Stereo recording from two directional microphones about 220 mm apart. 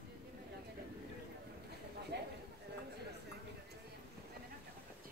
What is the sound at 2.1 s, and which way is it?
Clip-clop, 50° right (ahead or behind).